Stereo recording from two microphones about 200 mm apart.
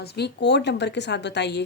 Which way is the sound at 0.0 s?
55° left (ahead or behind).